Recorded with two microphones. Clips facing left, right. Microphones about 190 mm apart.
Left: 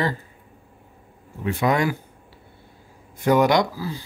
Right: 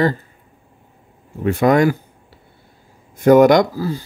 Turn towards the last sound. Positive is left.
turn(degrees=-45)  # may be behind; listen again after turning